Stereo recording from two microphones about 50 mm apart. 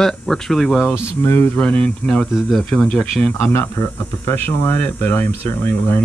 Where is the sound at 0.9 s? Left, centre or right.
Left.